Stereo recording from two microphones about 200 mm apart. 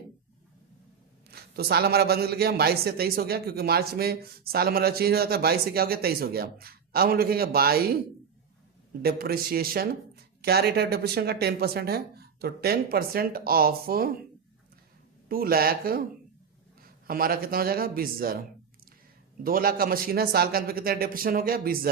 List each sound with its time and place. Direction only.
1.3 s a man's voice: 50° right (ahead or behind)
9.0 s a man's voice: 50° right (ahead or behind)
15.3 s a man's voice: 50° right (ahead or behind)